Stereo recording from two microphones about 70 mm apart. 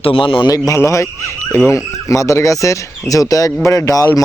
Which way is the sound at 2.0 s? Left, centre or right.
Left.